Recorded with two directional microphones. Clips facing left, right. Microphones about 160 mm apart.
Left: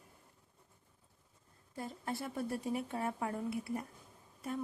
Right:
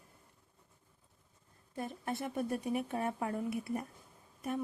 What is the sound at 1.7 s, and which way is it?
A woman's voice, 20° right (ahead or behind).